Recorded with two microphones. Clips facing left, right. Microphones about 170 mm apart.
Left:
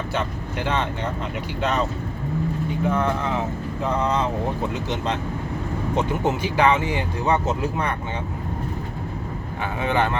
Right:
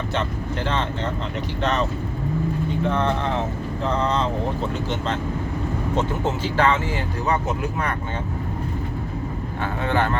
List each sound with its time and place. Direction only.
0.1 s speech: 10° left (ahead or behind)
2.8 s speech: 10° left (ahead or behind)
6.0 s speech: 15° left (ahead or behind)
9.8 s speech: 20° left (ahead or behind)